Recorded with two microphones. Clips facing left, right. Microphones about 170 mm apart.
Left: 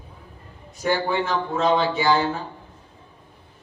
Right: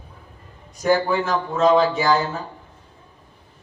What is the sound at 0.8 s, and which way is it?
A man's voice, 40° right (ahead or behind).